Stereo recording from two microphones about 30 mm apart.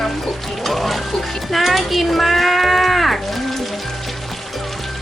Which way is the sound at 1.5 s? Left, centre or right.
Centre.